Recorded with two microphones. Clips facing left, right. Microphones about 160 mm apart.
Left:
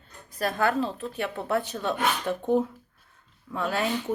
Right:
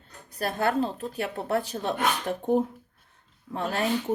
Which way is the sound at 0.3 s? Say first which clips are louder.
Even; 35° right (ahead or behind).